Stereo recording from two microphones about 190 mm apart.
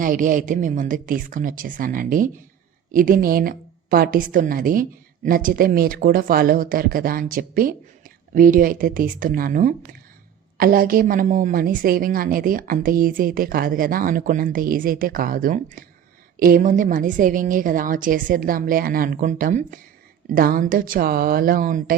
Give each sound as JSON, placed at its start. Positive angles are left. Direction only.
{"t": 0.0, "sound": "a woman's voice", "side_deg": -45}